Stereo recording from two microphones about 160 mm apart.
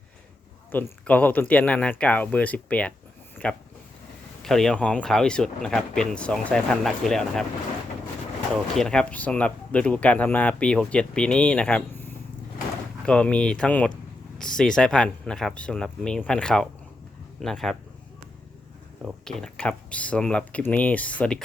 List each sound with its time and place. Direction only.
0.7 s speech: 10° left (ahead or behind)
8.5 s speech: centre (ahead or behind)
13.1 s speech: 5° left (ahead or behind)
19.2 s speech: 5° left (ahead or behind)